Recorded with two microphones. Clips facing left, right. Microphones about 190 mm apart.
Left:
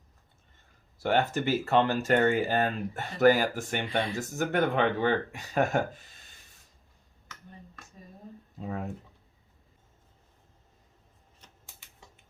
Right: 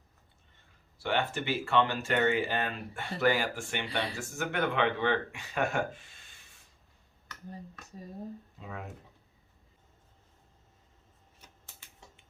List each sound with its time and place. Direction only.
1.0 s speech: 40° left (ahead or behind)